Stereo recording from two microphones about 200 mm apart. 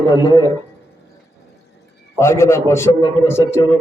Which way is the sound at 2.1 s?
15° left (ahead or behind).